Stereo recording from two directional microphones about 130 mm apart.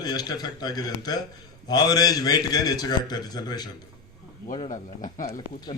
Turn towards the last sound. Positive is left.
turn(degrees=90)